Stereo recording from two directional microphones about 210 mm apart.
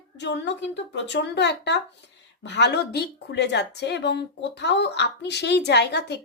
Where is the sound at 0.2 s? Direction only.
55° left (ahead or behind).